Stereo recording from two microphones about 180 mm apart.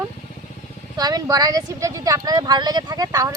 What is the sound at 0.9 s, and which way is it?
Speech, 20° right (ahead or behind).